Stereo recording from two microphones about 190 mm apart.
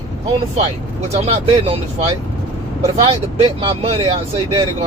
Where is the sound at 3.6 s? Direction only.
30° right (ahead or behind).